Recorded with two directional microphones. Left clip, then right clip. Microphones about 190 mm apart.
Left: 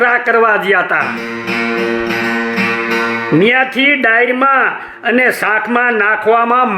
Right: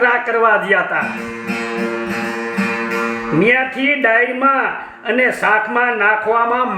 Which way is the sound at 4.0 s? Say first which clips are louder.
Left 3 dB; 35° left (ahead or behind).